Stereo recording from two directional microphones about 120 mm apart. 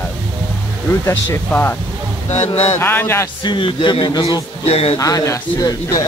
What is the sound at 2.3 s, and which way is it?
Mantra, 65° left (ahead or behind).